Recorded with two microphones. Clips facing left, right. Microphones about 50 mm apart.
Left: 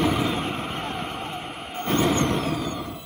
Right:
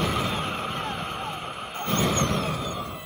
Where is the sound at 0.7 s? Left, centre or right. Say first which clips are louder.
Even; centre.